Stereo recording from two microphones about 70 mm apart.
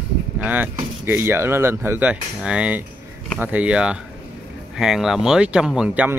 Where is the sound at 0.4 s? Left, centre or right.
Right.